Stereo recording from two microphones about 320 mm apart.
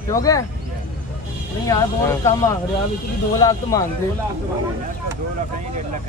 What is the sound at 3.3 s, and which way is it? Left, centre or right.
Speech, centre.